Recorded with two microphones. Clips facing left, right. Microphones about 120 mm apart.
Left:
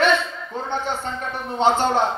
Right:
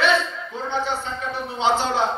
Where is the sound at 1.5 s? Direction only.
50° left (ahead or behind).